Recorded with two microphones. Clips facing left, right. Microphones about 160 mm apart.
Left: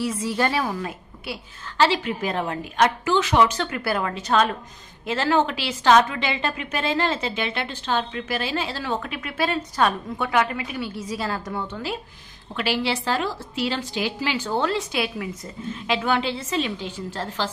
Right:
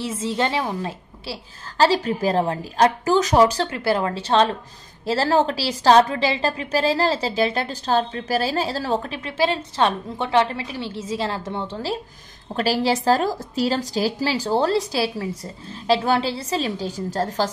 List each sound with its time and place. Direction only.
0.0 s a woman's voice: 25° right (ahead or behind); by 17.5 s 40° right (ahead or behind)